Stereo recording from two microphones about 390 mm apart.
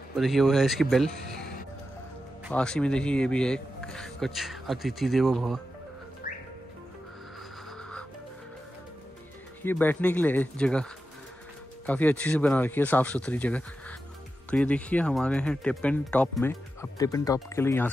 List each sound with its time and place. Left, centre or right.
0.1 s speech: centre
2.4 s speech: centre
9.6 s speech: centre